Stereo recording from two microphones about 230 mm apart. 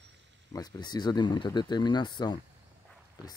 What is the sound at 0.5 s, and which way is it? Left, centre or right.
Speech, centre.